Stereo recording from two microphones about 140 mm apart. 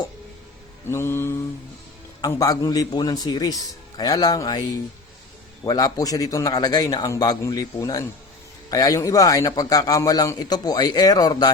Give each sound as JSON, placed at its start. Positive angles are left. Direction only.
{"t": 0.9, "sound": "mantra", "side_deg": 20}
{"t": 2.2, "sound": "a man's voice", "side_deg": 25}
{"t": 5.6, "sound": "a man's voice", "side_deg": 25}